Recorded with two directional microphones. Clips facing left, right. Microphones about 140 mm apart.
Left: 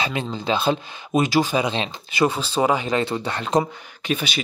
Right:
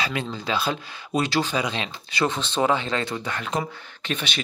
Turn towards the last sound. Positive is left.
turn(degrees=5)  # may be behind; listen again after turning